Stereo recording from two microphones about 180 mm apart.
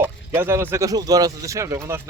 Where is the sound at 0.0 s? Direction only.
15° right (ahead or behind).